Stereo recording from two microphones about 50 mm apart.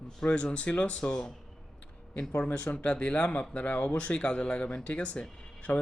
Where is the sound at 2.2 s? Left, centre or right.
Left.